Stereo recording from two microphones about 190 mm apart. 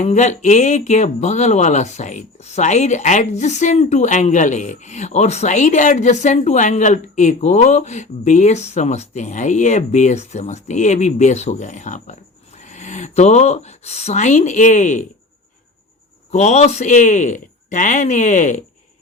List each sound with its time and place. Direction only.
0.0 s speech: 35° left (ahead or behind)
16.3 s speech: 35° left (ahead or behind)